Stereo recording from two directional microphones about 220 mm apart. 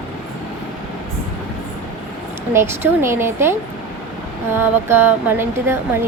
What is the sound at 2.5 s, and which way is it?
A woman's voice, 10° right (ahead or behind).